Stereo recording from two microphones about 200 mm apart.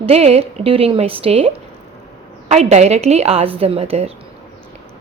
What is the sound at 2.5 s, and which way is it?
A woman's voice, 35° right (ahead or behind).